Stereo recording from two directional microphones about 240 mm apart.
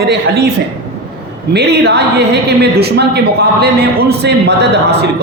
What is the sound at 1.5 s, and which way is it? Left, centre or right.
A man's voice, right.